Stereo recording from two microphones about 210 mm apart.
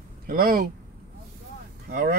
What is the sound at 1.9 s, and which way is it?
Speech, 45° right (ahead or behind).